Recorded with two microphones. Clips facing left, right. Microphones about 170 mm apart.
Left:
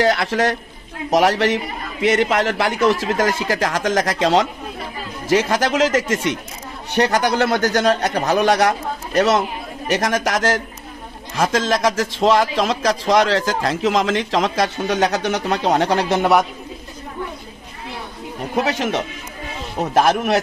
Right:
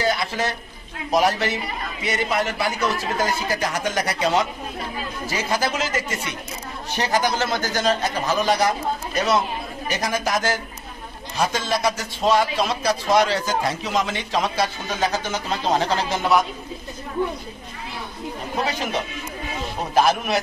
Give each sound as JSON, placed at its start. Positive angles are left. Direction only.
{"t": 0.0, "sound": "a man's voice", "side_deg": 90}
{"t": 6.9, "sound": "a man's voice", "side_deg": 65}
{"t": 18.6, "sound": "a man's voice", "side_deg": 80}